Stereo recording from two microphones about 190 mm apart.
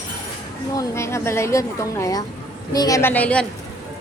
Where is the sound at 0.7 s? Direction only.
15° left (ahead or behind).